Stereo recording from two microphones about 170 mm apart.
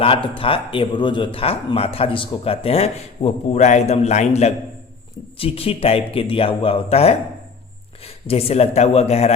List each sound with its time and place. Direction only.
0.3 s speech: 30° left (ahead or behind)
5.4 s speech: 35° left (ahead or behind)